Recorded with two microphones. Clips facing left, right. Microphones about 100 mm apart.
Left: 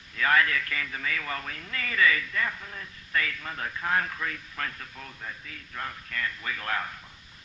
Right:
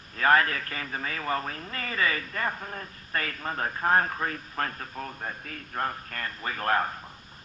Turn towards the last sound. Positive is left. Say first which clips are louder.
# right 5 dB
turn(degrees=-40)  # may be behind; listen again after turning